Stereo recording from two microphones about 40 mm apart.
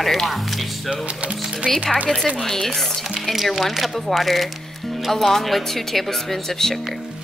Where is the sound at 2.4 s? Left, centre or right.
Centre.